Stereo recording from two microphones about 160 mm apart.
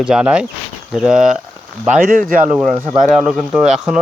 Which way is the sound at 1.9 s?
60° right (ahead or behind).